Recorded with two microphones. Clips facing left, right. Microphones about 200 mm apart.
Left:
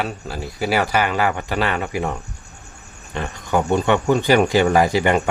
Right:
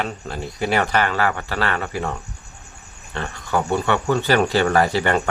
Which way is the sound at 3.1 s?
15° left (ahead or behind).